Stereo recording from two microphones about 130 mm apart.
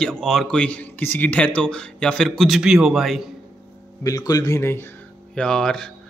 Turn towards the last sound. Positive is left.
turn(degrees=5)  # may be behind; listen again after turning